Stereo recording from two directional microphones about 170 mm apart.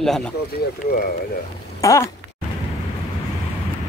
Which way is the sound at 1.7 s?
20° left (ahead or behind).